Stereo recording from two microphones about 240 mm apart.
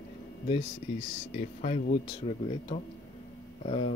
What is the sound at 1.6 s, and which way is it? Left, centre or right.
Speech, left.